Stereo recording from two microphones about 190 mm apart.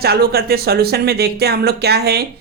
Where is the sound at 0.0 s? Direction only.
55° right (ahead or behind).